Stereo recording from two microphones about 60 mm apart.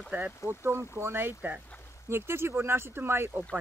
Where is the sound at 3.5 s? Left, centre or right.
Right.